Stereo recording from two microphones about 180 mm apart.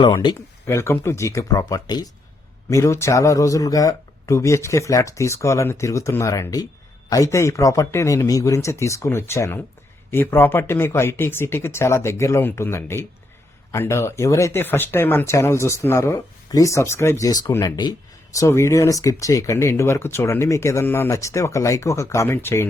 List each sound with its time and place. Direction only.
0.0 s speech: 25° left (ahead or behind)